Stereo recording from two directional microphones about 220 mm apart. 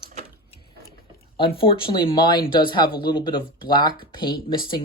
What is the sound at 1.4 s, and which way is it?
Speech, 25° left (ahead or behind).